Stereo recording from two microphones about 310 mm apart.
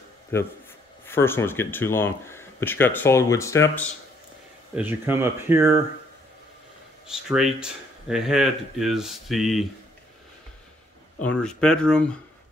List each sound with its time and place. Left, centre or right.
1.0 s speech: centre
4.7 s speech: centre
7.1 s speech: centre
11.1 s speech: centre